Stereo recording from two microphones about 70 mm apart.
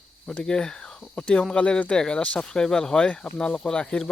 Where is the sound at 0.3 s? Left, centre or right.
Centre.